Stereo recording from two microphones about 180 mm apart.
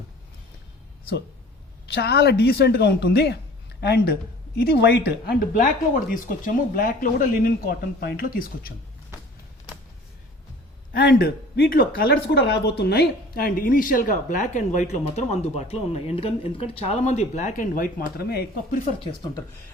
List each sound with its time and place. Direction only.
1.9 s speech: 65° left (ahead or behind)
10.9 s speech: 60° left (ahead or behind)